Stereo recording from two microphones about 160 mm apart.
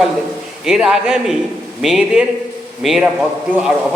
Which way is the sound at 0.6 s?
5° right (ahead or behind).